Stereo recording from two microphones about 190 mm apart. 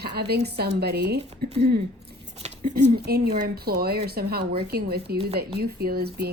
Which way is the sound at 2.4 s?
35° right (ahead or behind).